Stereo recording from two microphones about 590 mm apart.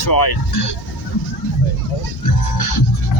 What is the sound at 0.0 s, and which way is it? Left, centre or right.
Speech, left.